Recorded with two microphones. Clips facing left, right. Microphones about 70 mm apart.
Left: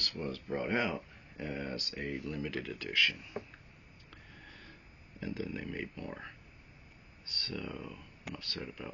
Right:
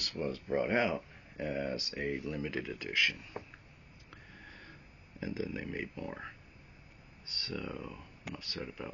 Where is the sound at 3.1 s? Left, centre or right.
Centre.